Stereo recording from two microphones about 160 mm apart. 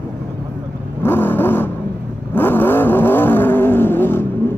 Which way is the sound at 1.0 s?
15° left (ahead or behind).